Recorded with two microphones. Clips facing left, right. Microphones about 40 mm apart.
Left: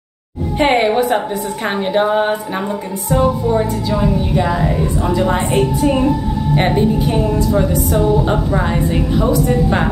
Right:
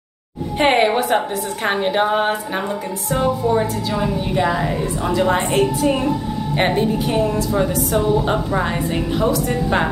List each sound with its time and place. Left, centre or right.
0.6 s a woman's voice: centre